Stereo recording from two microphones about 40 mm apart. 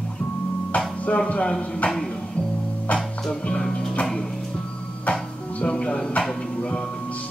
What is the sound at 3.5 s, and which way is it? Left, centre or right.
Music, left.